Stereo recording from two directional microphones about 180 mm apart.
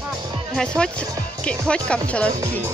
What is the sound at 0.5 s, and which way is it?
Speech, 5° left (ahead or behind).